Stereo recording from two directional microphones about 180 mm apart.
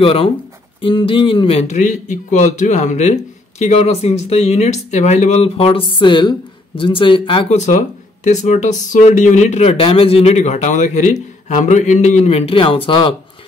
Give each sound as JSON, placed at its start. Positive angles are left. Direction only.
{"t": 0.0, "sound": "speech", "side_deg": 30}